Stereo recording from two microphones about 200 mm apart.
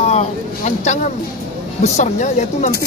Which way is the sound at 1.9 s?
35° left (ahead or behind).